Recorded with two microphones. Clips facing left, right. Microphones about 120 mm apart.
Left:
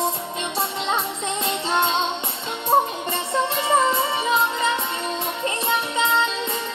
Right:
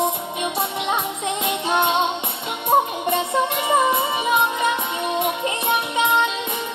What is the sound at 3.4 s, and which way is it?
Music, 15° right (ahead or behind).